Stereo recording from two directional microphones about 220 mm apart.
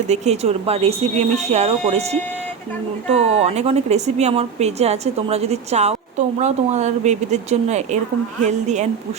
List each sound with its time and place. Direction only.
0.1 s a woman's voice: 30° right (ahead or behind)